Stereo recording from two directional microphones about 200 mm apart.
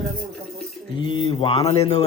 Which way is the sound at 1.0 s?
25° left (ahead or behind).